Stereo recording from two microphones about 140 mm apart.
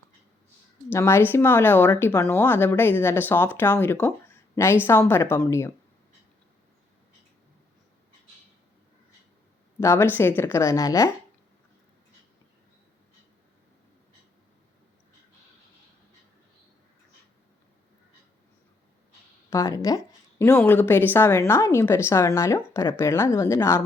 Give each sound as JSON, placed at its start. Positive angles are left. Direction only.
{"t": 0.9, "sound": "a woman's voice", "side_deg": 20}
{"t": 9.8, "sound": "a woman's voice", "side_deg": 20}
{"t": 19.5, "sound": "a woman's voice", "side_deg": 20}
{"t": 20.6, "sound": "a woman's voice", "side_deg": 15}